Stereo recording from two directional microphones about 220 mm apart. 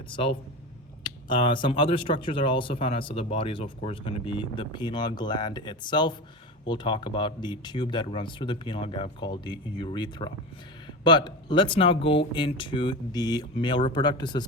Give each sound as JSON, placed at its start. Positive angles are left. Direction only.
{"t": 0.1, "sound": "speech", "side_deg": 25}